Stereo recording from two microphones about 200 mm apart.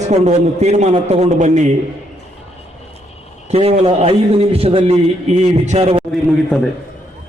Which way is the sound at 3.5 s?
30° right (ahead or behind).